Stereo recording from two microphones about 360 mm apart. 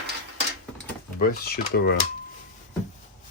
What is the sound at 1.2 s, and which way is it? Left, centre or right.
Speech, left.